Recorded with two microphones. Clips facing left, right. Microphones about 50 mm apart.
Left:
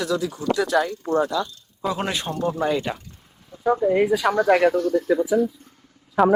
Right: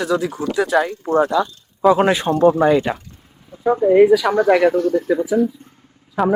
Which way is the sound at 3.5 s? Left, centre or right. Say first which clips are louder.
Right 6 dB; centre.